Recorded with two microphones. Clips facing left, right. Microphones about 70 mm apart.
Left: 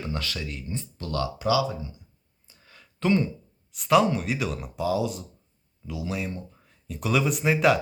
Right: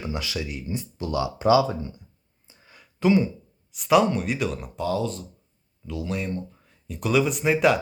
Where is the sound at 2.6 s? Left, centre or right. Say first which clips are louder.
Right 3 dB; centre.